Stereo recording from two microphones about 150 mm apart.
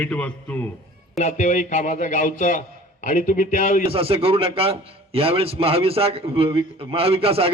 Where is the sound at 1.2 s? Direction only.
55° left (ahead or behind).